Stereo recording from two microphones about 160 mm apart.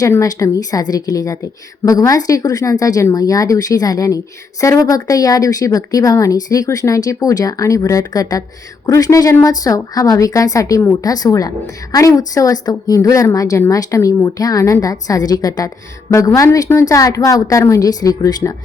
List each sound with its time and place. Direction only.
0.0 s speech: 20° left (ahead or behind)